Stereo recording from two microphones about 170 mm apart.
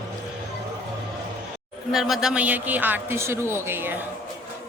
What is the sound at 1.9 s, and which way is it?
A man's voice, centre (ahead or behind).